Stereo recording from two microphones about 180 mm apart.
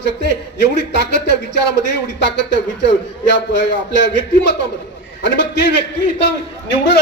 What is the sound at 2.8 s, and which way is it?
Speech, 80° left.